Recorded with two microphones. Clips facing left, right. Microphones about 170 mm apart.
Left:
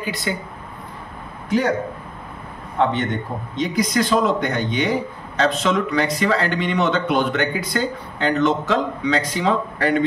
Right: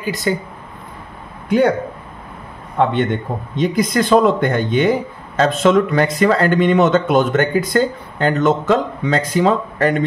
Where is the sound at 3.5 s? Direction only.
50° right (ahead or behind).